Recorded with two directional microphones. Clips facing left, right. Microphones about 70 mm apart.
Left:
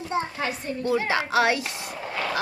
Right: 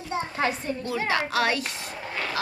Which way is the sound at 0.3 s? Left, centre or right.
Right.